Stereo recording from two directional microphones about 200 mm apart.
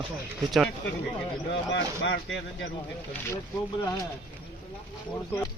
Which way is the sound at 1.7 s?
65° left (ahead or behind).